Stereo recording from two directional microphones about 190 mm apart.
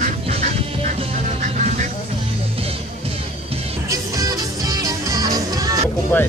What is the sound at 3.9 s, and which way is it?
Music, 20° right (ahead or behind).